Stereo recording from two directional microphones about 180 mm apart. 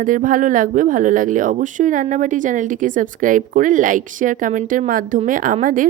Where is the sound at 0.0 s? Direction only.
50° right (ahead or behind).